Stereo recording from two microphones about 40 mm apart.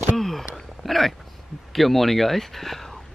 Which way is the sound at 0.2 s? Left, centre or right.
Centre.